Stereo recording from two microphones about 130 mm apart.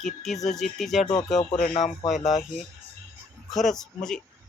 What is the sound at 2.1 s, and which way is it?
Speech, 70° left (ahead or behind).